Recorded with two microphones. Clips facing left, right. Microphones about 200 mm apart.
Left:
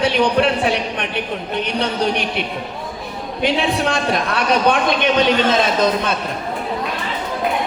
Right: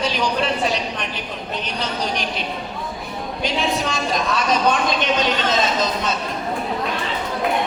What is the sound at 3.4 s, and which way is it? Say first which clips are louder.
A woman's voice: left 5 dB; 60° left (ahead or behind).